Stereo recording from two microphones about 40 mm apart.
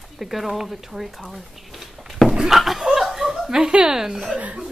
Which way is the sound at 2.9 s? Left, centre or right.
Centre.